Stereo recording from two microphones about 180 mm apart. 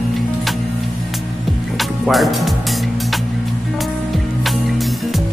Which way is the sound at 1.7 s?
Centre (ahead or behind).